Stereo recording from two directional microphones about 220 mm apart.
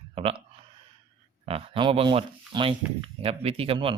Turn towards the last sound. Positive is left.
turn(degrees=-25)  # may be behind; listen again after turning